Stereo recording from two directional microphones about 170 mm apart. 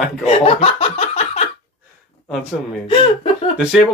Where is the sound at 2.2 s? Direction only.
Centre (ahead or behind).